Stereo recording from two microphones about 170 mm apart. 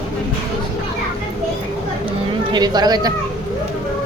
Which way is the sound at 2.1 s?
25° right (ahead or behind).